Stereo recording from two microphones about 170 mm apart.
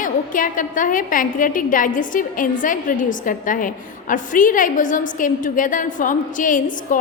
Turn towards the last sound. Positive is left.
turn(degrees=50)  # may be behind; listen again after turning